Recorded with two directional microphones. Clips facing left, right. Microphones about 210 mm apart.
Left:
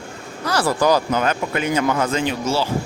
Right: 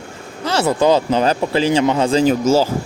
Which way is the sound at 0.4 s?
25° right (ahead or behind).